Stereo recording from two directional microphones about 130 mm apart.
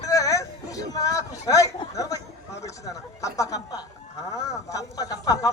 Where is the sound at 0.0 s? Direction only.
25° left (ahead or behind).